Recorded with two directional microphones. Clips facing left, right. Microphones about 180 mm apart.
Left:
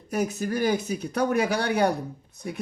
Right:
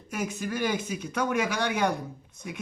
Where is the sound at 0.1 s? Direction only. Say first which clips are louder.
Left 5 dB; 40° left (ahead or behind).